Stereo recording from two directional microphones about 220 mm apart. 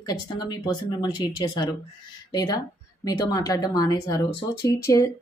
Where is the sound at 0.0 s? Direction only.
20° left (ahead or behind).